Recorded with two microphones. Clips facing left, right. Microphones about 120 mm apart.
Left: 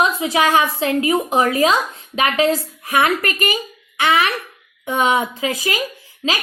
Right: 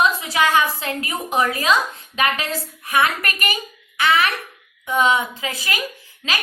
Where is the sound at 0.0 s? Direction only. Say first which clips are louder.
Left 2 dB; 30° left (ahead or behind).